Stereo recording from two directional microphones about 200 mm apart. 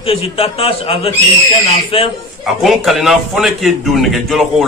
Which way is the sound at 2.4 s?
Centre (ahead or behind).